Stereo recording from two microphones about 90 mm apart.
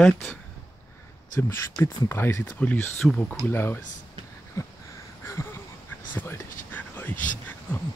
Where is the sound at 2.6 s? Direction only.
15° left (ahead or behind).